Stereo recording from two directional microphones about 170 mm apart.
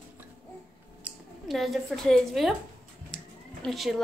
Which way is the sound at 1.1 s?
10° right (ahead or behind).